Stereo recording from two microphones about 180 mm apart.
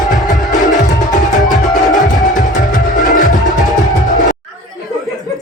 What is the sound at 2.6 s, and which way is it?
Music, 50° left (ahead or behind).